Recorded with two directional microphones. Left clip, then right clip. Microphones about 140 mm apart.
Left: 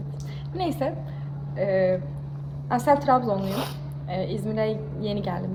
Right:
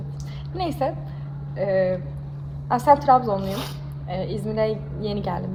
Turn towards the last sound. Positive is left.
turn(degrees=-5)  # may be behind; listen again after turning